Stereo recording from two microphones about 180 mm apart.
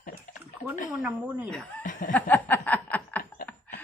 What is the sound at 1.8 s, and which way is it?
Snicker, 45° left (ahead or behind).